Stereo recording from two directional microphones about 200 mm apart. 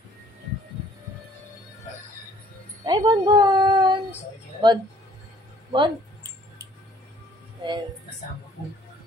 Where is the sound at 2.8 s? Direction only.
20° right (ahead or behind).